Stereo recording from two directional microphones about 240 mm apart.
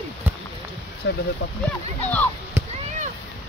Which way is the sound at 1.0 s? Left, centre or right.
Left.